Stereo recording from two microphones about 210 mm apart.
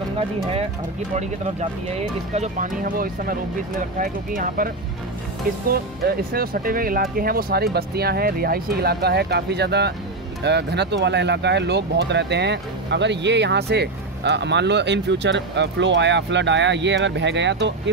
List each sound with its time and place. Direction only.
1.1 s speech: 30° right (ahead or behind); by 17.7 s 60° right (ahead or behind)